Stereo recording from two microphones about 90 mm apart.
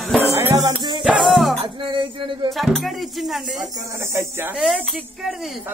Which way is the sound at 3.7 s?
35° right (ahead or behind).